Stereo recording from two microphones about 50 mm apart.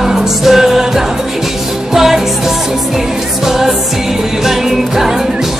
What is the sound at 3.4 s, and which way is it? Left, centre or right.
Music, centre.